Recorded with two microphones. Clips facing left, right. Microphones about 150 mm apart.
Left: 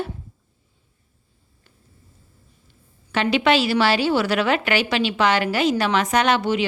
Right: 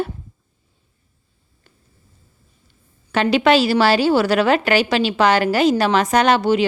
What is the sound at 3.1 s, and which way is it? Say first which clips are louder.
A woman's voice: right 4 dB; 40° right (ahead or behind).